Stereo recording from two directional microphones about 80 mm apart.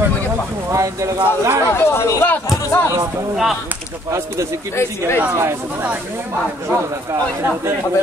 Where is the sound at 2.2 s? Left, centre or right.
Left.